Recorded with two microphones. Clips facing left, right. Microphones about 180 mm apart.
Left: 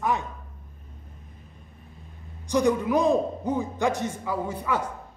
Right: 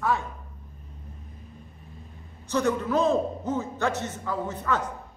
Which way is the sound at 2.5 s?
15° left (ahead or behind).